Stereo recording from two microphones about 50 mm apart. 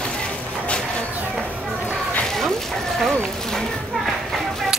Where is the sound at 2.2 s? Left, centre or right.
Centre.